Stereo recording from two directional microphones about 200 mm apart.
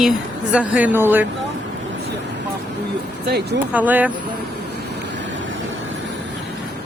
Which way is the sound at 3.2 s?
55° right (ahead or behind).